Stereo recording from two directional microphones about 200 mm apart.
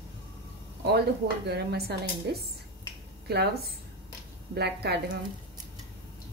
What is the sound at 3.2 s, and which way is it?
A woman's voice, 50° right (ahead or behind).